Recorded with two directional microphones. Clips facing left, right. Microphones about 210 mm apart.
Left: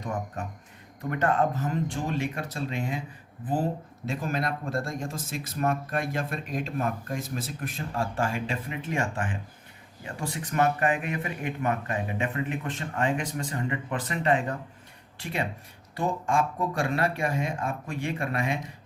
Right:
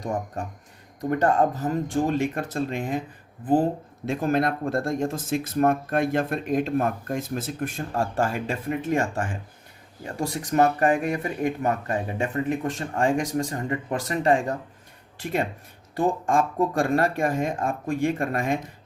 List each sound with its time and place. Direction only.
1.1 s speech: 40° right (ahead or behind)
4.0 s speech: 55° right (ahead or behind)